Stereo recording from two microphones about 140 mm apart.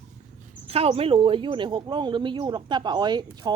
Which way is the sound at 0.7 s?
45° right (ahead or behind).